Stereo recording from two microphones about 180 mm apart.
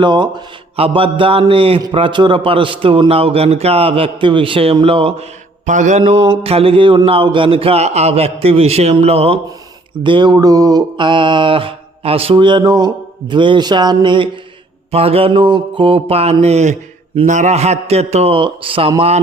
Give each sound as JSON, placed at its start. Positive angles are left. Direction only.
{"t": 0.0, "sound": "speech", "side_deg": -25}
{"t": 5.6, "sound": "mantra", "side_deg": -45}
{"t": 10.0, "sound": "speech", "side_deg": -25}
{"t": 14.9, "sound": "mantra", "side_deg": -35}